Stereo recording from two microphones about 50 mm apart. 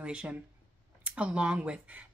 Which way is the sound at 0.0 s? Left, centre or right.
Centre.